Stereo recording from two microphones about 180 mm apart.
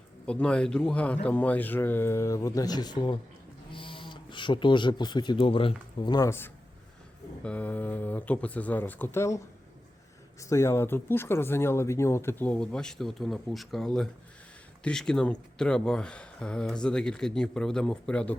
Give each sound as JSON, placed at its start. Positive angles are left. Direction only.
{"t": 0.3, "sound": "speech", "side_deg": 5}
{"t": 10.5, "sound": "speech", "side_deg": 15}